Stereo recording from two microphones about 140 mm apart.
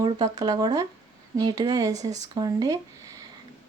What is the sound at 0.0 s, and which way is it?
Speech, 30° right (ahead or behind).